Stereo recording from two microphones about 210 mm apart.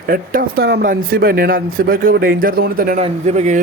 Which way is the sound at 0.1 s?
45° right (ahead or behind).